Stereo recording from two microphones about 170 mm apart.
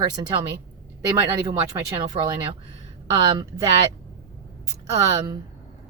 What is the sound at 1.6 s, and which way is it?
Speech, 25° right (ahead or behind).